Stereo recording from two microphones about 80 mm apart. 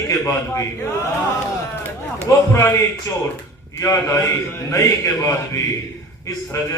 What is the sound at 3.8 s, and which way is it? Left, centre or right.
A man's voice, left.